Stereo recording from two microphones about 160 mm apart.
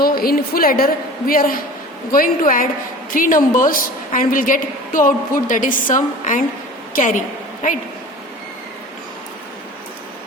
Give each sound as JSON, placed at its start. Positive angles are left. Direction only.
{"t": 0.0, "sound": "a woman's voice", "side_deg": 65}